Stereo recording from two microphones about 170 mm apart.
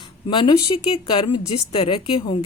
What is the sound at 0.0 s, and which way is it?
Speech, 30° left (ahead or behind).